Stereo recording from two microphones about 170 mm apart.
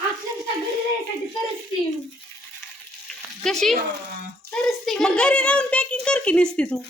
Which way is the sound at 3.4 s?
Centre (ahead or behind).